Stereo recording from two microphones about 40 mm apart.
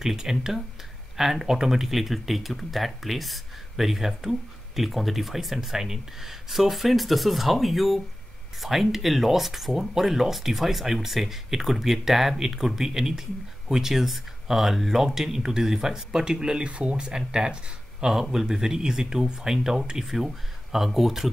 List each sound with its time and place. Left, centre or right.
0.0 s speech: centre
16.6 s speech: right
17.0 s speech: centre
18.3 s speech: centre